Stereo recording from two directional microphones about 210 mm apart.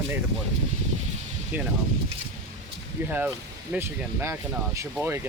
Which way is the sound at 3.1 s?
10° right (ahead or behind).